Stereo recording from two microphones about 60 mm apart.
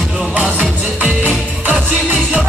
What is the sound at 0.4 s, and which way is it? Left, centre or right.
Music, centre.